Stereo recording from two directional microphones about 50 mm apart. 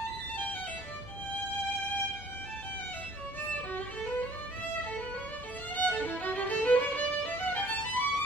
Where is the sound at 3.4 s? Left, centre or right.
Left.